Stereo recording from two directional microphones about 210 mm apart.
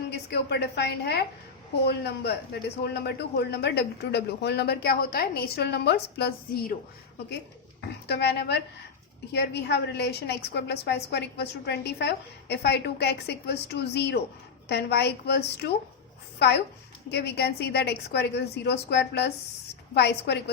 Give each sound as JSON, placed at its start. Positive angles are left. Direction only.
{"t": 0.1, "sound": "a woman's voice", "side_deg": 50}
{"t": 7.8, "sound": "speech", "side_deg": 50}
{"t": 17.1, "sound": "speech", "side_deg": 50}